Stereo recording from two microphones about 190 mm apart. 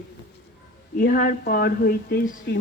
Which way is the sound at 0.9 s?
45° left (ahead or behind).